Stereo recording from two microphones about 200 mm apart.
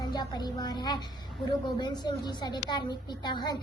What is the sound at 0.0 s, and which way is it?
A woman's voice, 20° left (ahead or behind).